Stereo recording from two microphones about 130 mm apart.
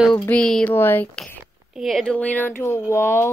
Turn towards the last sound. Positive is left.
turn(degrees=20)  # may be behind; listen again after turning